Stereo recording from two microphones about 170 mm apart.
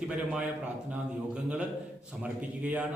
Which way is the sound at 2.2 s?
10° right (ahead or behind).